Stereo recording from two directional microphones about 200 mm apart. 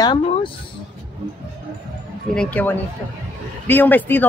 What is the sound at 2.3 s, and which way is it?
Speech, 5° left (ahead or behind).